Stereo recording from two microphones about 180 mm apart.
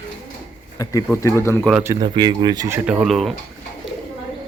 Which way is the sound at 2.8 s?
5° right (ahead or behind).